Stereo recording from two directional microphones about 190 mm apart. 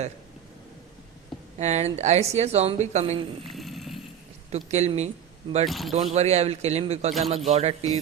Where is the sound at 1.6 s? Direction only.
35° right (ahead or behind).